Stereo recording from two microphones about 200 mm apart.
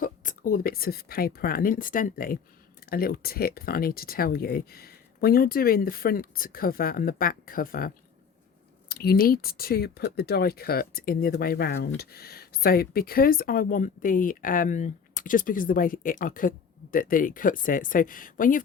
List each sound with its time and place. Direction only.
0.0 s speech: 40° left (ahead or behind)